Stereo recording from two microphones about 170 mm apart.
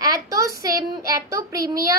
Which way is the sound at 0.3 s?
20° right (ahead or behind).